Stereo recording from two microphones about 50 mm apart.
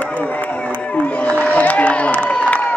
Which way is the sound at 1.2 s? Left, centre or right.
Left.